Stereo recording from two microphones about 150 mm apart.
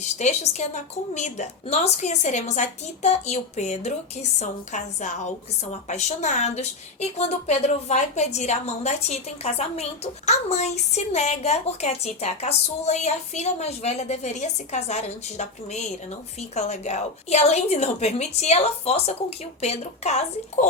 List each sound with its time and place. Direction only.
0.0 s a woman's voice: 50° left (ahead or behind)